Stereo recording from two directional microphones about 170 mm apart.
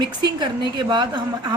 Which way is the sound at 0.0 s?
25° right (ahead or behind).